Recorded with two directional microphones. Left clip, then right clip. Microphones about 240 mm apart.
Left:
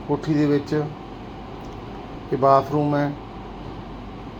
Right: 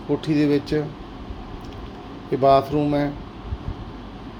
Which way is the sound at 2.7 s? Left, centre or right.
Centre.